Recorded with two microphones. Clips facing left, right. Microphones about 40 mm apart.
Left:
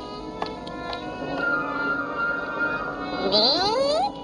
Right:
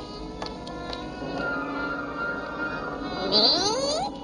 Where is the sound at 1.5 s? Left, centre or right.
Centre.